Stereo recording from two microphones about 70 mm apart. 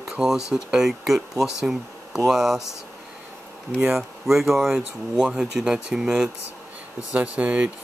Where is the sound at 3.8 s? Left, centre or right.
Centre.